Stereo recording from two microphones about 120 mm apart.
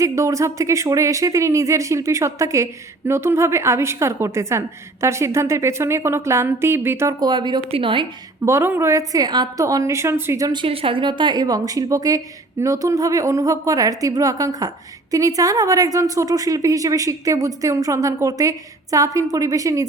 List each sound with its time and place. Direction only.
0.0 s a woman's voice: 25° right (ahead or behind)
7.2 s speech: 35° right (ahead or behind)
8.4 s a woman's voice: 20° right (ahead or behind)
10.5 s a woman's voice: 45° right (ahead or behind); by 19.8 s 30° right (ahead or behind)